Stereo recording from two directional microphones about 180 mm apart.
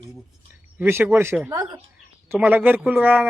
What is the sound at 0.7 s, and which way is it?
Speech, 10° right (ahead or behind).